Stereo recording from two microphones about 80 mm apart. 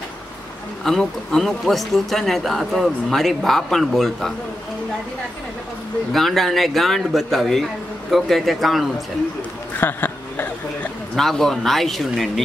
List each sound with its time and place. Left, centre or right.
0.8 s speech: centre
6.1 s speech: centre
9.8 s a sound: left
11.1 s speech: centre